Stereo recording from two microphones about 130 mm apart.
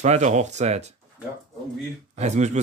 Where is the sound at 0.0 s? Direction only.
60° right (ahead or behind).